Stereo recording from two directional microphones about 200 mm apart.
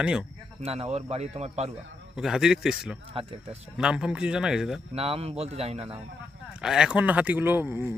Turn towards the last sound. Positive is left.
turn(degrees=-10)  # may be behind; listen again after turning